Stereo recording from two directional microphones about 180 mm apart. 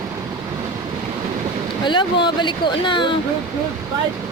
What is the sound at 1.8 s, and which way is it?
Speech, 25° left (ahead or behind).